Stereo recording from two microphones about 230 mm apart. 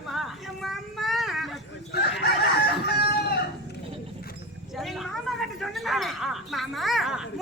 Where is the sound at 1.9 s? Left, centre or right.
Left.